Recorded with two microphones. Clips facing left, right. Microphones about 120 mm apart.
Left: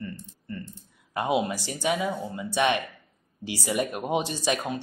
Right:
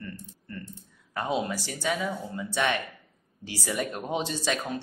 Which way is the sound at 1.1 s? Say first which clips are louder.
Left 3 dB; 15° left (ahead or behind).